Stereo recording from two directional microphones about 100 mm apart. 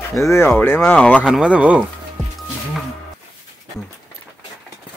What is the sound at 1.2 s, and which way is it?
Speech, 10° right (ahead or behind).